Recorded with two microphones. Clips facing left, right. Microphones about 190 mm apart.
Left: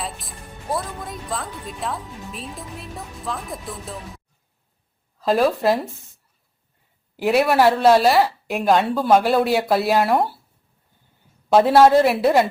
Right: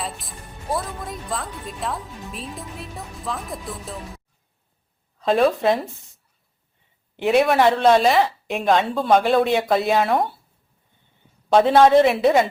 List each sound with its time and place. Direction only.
0.0 s a woman's voice: centre (ahead or behind)
5.2 s a woman's voice: centre (ahead or behind)
7.2 s a woman's voice: centre (ahead or behind)
11.4 s a woman's voice: 5° left (ahead or behind)